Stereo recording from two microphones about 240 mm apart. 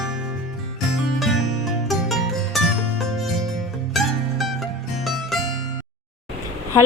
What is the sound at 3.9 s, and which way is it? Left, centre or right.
Music, centre.